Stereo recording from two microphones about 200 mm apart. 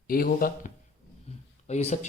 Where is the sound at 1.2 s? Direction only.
35° left (ahead or behind).